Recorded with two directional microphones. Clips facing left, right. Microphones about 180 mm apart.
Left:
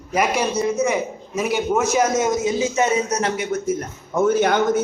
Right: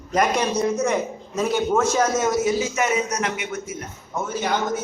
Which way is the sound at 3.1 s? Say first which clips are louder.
Left 4 dB; 35° left (ahead or behind).